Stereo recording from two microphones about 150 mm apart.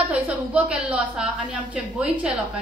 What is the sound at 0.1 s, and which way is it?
A woman's voice, 10° right (ahead or behind).